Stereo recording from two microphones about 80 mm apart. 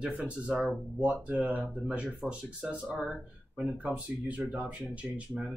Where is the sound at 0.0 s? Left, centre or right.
Centre.